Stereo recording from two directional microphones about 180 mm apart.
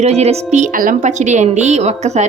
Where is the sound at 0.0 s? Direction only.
35° right (ahead or behind).